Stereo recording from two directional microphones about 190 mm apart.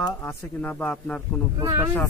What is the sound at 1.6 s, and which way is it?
Speech, 15° right (ahead or behind).